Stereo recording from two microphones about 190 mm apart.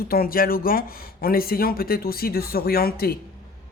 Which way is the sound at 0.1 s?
50° left (ahead or behind).